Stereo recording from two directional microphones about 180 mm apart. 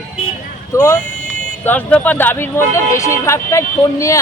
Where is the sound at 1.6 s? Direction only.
10° left (ahead or behind).